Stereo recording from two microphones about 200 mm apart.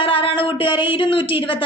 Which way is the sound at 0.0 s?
25° left (ahead or behind).